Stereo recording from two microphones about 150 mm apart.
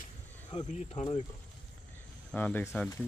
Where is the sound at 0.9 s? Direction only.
40° left (ahead or behind).